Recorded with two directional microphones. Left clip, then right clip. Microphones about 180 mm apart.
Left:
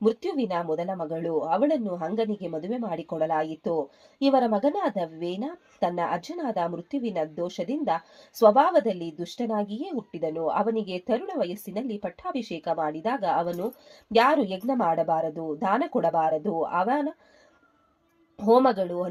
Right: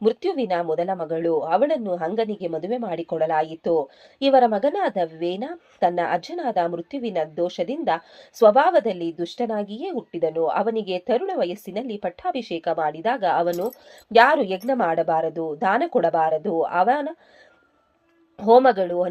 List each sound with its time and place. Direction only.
0.0 s a woman's voice: 15° right (ahead or behind)
18.3 s a woman's voice: 15° right (ahead or behind)